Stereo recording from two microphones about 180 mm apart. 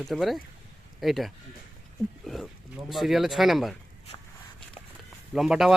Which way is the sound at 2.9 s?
Centre (ahead or behind).